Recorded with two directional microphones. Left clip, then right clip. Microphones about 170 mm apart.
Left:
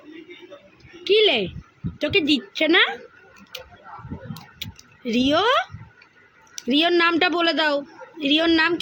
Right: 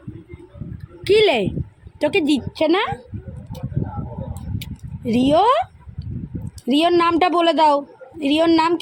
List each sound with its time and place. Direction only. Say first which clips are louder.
1.0 s a woman's voice: right 3 dB; 25° right (ahead or behind); by 2.9 s 10° right (ahead or behind)
4.6 s a sound: right 2 dB; 15° right (ahead or behind)
6.7 s a woman's voice: right 2 dB; 15° right (ahead or behind)